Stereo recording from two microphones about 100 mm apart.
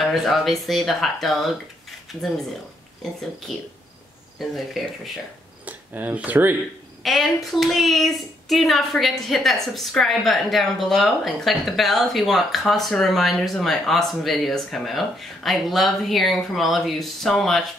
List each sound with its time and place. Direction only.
0.0 s speech: centre (ahead or behind)
3.5 s speech: centre (ahead or behind)
5.7 s speech: 15° right (ahead or behind)
7.0 s speech: centre (ahead or behind)